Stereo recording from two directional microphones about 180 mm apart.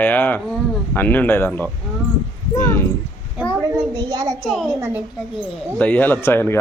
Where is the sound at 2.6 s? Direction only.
15° left (ahead or behind).